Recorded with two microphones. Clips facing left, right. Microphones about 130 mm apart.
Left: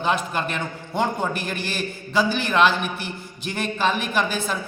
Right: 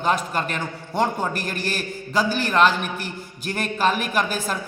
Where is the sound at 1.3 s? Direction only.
40° right (ahead or behind).